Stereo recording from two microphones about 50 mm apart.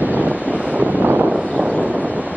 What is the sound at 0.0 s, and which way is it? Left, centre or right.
Wind noise, right.